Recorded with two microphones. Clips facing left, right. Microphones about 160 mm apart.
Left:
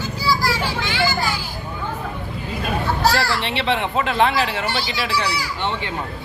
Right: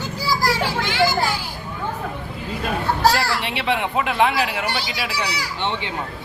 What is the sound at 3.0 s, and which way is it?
Speech, 10° right (ahead or behind).